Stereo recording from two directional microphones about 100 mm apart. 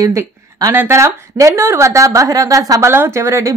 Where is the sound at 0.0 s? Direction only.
30° right (ahead or behind).